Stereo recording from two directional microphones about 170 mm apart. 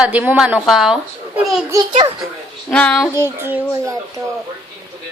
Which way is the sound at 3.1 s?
15° right (ahead or behind).